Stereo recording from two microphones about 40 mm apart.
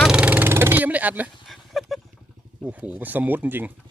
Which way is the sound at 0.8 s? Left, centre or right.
Right.